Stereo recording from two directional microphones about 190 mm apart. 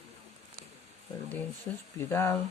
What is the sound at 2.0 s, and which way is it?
Speech, 15° left (ahead or behind).